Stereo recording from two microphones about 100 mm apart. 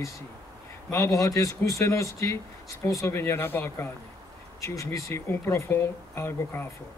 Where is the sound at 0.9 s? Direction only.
35° left (ahead or behind).